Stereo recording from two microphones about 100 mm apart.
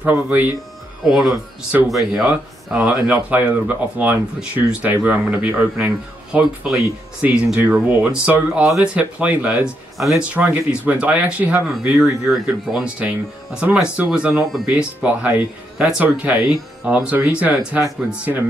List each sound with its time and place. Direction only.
0.0 s speech: 15° right (ahead or behind)
1.0 s speech: 5° right (ahead or behind)
2.2 s speech: 10° right (ahead or behind)
9.9 s speech: centre (ahead or behind)
10.3 s speech: 15° right (ahead or behind)